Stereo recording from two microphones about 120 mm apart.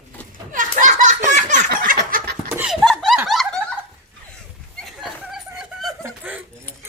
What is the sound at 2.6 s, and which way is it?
Chuckle, centre (ahead or behind).